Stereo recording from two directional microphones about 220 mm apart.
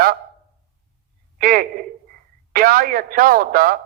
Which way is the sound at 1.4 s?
40° right (ahead or behind).